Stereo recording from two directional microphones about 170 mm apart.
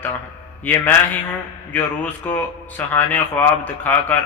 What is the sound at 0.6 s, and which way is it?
Speech, 10° left (ahead or behind).